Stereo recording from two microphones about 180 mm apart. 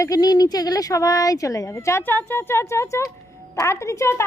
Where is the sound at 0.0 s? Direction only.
20° left (ahead or behind).